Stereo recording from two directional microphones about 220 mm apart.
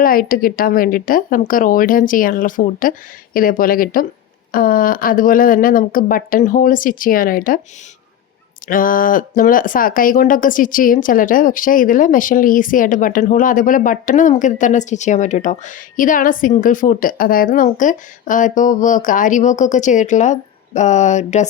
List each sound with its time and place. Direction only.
0.0 s speech: 40° left (ahead or behind)
8.6 s speech: 40° left (ahead or behind)